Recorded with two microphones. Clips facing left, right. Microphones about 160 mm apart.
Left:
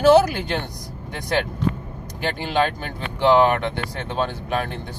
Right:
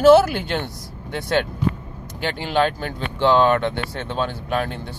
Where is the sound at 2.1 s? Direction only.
15° left (ahead or behind).